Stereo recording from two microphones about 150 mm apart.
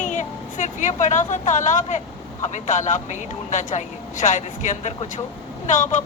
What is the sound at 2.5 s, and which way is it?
A woman's voice, 55° left (ahead or behind).